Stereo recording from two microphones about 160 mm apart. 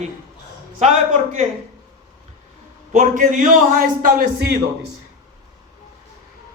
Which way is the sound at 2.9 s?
50° right (ahead or behind).